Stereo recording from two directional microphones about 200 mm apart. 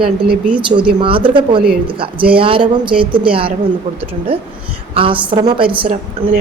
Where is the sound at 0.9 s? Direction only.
25° right (ahead or behind).